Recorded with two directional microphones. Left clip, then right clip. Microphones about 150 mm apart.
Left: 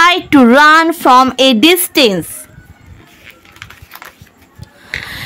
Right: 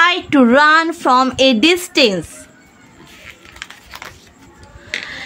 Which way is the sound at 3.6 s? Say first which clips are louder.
Right 1 dB; 5° right (ahead or behind).